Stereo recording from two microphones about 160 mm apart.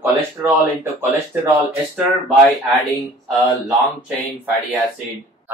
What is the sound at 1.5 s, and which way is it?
Speech, centre (ahead or behind).